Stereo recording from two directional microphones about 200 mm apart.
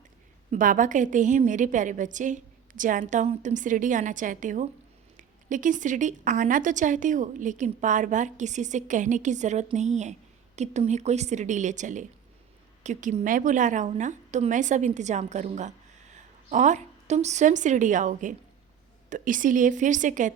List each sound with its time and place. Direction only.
0.5 s a woman's voice: 40° right (ahead or behind)